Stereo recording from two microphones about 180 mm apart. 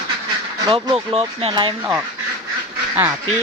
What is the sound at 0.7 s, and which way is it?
Speech, 30° right (ahead or behind).